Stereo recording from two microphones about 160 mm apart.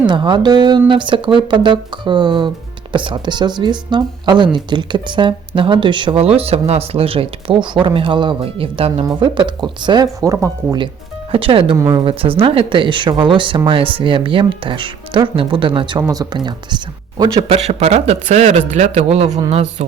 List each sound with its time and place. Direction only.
0.1 s speech: 30° right (ahead or behind)
11.3 s speech: 35° right (ahead or behind)
17.5 s speech: 40° right (ahead or behind)